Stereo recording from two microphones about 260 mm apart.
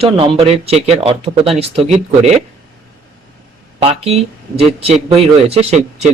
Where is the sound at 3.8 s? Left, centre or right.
Right.